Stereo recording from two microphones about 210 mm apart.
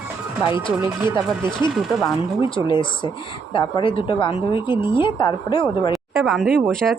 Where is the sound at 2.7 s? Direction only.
20° left (ahead or behind).